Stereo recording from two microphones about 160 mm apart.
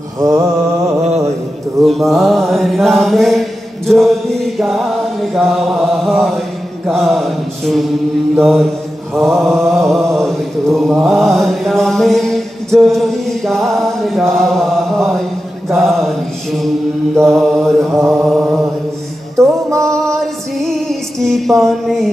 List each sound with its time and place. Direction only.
0.2 s mantra: 15° right (ahead or behind)
1.0 s mantra: 40° right (ahead or behind)
1.8 s mantra: centre (ahead or behind)
19.3 s music: 20° right (ahead or behind)
19.8 s female singing: 5° left (ahead or behind)